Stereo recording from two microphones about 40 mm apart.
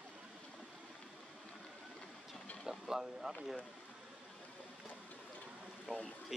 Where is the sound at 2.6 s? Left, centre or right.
Centre.